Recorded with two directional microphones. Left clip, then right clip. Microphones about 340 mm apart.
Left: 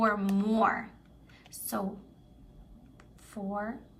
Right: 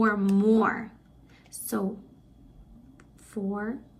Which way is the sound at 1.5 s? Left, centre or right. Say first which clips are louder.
Right 3 dB; centre.